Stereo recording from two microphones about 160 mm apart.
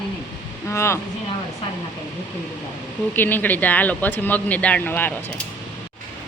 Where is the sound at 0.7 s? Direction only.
15° left (ahead or behind).